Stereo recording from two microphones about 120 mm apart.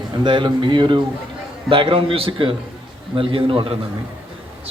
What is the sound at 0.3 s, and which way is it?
Speech, 40° right (ahead or behind).